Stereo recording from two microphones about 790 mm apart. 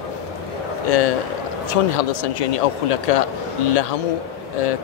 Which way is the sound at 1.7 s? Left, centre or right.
Left.